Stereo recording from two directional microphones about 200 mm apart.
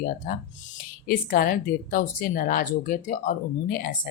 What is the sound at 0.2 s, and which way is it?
A woman's voice, 45° left (ahead or behind).